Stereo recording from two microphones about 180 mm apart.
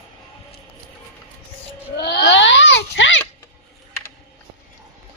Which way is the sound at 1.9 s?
65° left (ahead or behind).